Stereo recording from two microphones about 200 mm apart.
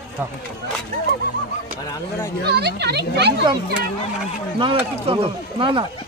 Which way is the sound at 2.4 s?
55° right (ahead or behind).